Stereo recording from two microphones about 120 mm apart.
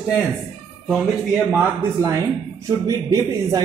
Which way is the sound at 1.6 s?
20° right (ahead or behind).